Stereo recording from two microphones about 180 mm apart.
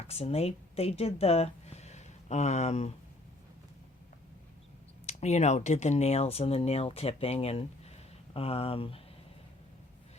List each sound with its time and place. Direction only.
0.1 s speech: 35° left (ahead or behind)
5.0 s speech: 40° left (ahead or behind)